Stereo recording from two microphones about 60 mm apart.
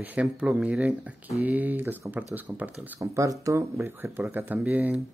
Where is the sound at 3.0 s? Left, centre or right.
Right.